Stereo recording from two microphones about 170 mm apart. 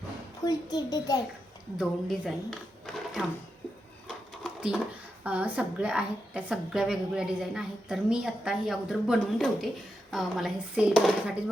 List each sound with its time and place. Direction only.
0.4 s a child's voice: 20° left (ahead or behind)
1.8 s speech: centre (ahead or behind)
4.4 s a sound: 5° right (ahead or behind)
5.2 s a woman's voice: 10° right (ahead or behind)